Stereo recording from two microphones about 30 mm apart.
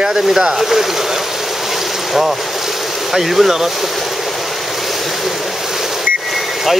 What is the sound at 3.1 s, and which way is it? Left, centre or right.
Speech, centre.